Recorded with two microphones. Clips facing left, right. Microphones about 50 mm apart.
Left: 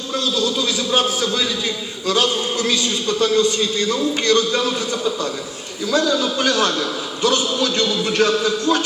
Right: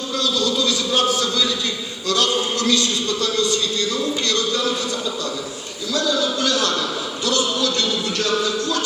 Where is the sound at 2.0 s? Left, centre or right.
Centre.